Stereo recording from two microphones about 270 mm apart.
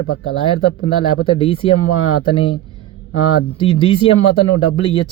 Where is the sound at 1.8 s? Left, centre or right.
Left.